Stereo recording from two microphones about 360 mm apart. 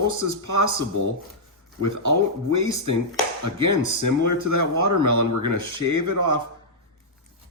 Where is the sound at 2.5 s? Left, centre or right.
Right.